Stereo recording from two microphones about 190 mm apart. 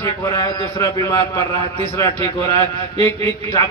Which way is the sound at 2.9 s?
30° right (ahead or behind).